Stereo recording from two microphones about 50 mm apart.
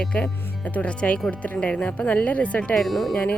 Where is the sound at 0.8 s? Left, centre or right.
Left.